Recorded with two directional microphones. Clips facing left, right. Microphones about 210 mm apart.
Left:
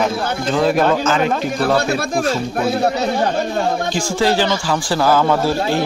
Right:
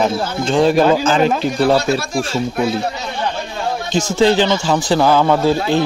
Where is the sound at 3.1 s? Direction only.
45° left (ahead or behind).